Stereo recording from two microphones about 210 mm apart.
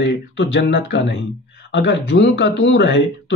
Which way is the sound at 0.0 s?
60° left (ahead or behind).